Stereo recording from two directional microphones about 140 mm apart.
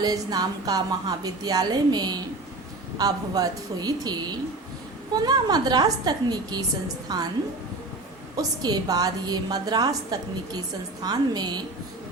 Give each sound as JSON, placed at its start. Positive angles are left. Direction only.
{"t": 0.0, "sound": "a woman's voice", "side_deg": -30}
{"t": 8.4, "sound": "a woman's voice", "side_deg": -30}